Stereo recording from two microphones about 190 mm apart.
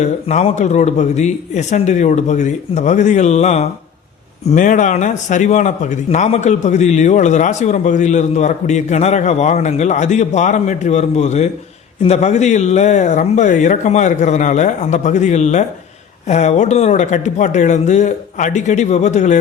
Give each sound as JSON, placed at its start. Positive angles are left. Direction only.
{"t": 0.0, "sound": "speech", "side_deg": 35}